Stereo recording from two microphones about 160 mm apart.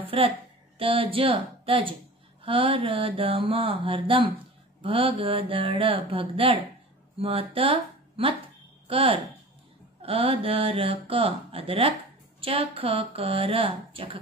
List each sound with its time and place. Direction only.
0.7 s speech: 35° right (ahead or behind)